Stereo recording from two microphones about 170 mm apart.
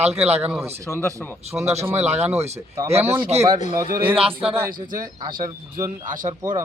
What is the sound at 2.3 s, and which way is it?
Speech, 40° right (ahead or behind).